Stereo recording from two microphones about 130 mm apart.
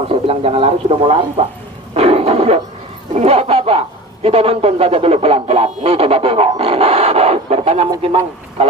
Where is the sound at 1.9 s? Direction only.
50° right (ahead or behind).